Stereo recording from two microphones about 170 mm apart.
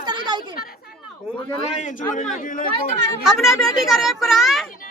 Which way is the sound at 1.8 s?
50° left (ahead or behind).